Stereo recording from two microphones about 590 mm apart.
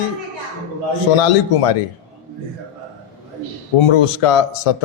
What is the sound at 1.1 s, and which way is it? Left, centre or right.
Speech, left.